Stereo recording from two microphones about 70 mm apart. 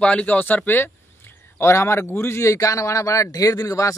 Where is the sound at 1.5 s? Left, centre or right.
Left.